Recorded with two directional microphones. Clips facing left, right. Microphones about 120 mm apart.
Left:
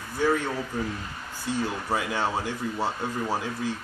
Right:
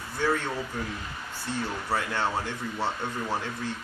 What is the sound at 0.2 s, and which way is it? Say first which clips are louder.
Speech: left 3 dB; 10° left (ahead or behind).